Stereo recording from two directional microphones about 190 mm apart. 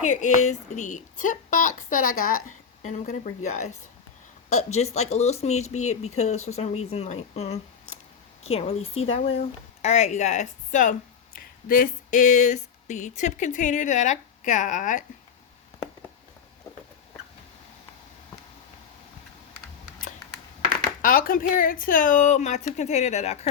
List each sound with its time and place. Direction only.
0.0 s a woman's voice: 40° left (ahead or behind)
11.3 s a sound: 45° left (ahead or behind)
21.0 s a woman's voice: 50° left (ahead or behind)